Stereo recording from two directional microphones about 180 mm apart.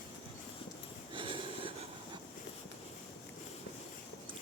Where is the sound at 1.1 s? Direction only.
30° right (ahead or behind).